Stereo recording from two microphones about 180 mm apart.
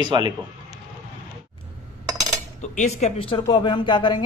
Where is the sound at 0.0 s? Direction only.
25° right (ahead or behind).